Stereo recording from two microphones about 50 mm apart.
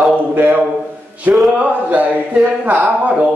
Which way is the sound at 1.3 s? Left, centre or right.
Right.